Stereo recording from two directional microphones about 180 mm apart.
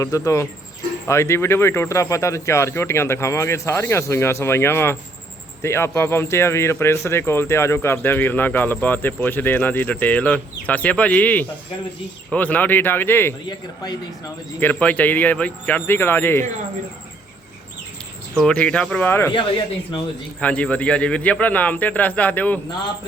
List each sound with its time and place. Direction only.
0.0 s speech: 15° left (ahead or behind)
14.6 s speech: 10° left (ahead or behind)
18.3 s speech: 5° left (ahead or behind)
19.3 s speech: 30° left (ahead or behind)
20.4 s speech: 5° left (ahead or behind)